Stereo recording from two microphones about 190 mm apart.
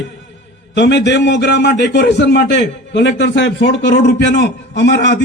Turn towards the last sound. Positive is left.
turn(degrees=65)  # may be behind; listen again after turning